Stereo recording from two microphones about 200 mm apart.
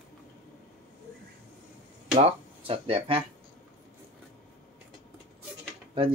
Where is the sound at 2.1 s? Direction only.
30° right (ahead or behind).